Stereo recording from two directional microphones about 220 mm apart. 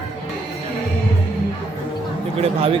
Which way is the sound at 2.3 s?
25° right (ahead or behind).